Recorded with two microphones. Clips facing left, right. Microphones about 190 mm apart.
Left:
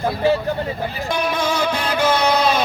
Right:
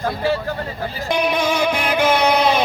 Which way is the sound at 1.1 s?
20° right (ahead or behind).